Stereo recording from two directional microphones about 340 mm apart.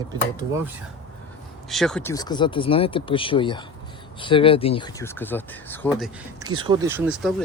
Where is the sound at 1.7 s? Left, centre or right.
Centre.